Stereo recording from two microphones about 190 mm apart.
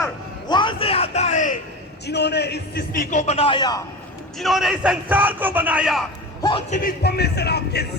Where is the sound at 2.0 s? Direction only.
60° left (ahead or behind); by 3.8 s 20° left (ahead or behind).